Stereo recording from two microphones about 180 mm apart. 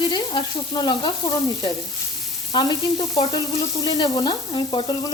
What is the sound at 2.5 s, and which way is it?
Frying, 20° left (ahead or behind).